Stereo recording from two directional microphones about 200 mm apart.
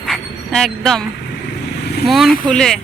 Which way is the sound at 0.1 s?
Centre (ahead or behind).